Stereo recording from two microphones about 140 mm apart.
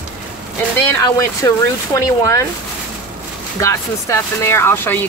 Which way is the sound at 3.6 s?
20° left (ahead or behind).